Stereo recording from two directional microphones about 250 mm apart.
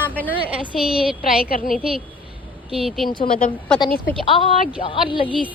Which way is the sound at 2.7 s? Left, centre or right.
Centre.